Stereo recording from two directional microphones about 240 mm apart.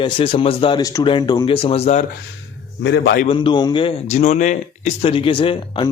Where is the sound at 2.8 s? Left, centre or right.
Left.